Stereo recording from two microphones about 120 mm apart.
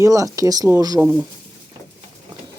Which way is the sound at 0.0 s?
30° right (ahead or behind).